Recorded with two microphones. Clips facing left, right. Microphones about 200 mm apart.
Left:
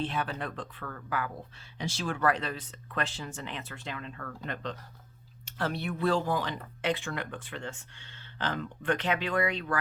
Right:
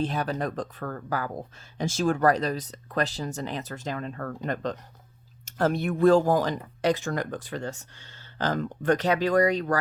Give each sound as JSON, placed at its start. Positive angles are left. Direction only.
{"t": 0.0, "sound": "speech", "side_deg": -40}